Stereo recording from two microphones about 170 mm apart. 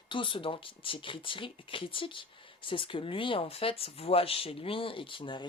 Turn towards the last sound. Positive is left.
turn(degrees=30)  # may be behind; listen again after turning